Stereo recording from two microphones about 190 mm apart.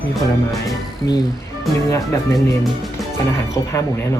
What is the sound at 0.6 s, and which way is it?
Speech, 20° left (ahead or behind).